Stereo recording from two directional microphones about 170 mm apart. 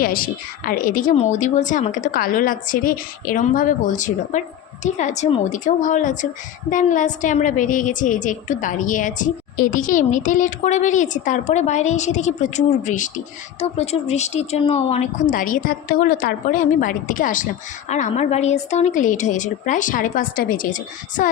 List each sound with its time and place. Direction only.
0.0 s a woman's voice: 55° left (ahead or behind)